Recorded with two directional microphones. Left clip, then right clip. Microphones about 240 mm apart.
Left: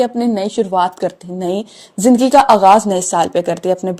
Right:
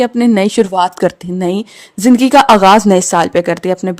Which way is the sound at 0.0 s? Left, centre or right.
Right.